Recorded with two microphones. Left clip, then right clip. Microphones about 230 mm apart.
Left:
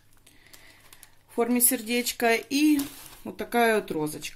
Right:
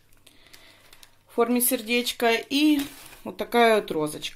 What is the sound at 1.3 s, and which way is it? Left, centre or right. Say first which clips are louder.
Speech: right 3 dB; left.